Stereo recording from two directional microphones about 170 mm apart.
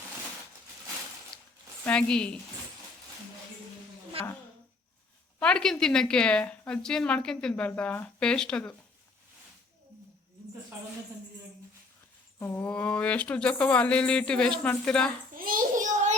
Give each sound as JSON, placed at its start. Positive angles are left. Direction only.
{"t": 1.3, "sound": "a sound", "side_deg": 5}
{"t": 1.8, "sound": "a woman's voice", "side_deg": 5}
{"t": 4.2, "sound": "a woman's voice", "side_deg": -35}
{"t": 5.4, "sound": "a woman's voice", "side_deg": 5}
{"t": 12.4, "sound": "speech", "side_deg": 10}
{"t": 15.4, "sound": "a sound", "side_deg": -55}